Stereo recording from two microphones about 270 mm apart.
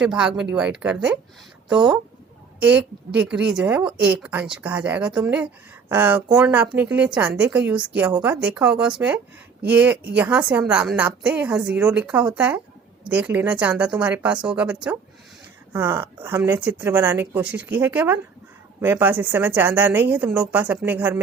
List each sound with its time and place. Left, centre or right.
0.0 s speech: centre
2.6 s a woman's voice: centre